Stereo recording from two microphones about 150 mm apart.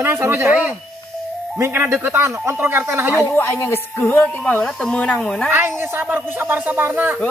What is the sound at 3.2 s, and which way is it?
A woman's voice, 15° left (ahead or behind).